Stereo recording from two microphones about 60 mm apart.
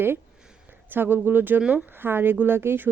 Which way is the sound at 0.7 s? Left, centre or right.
Right.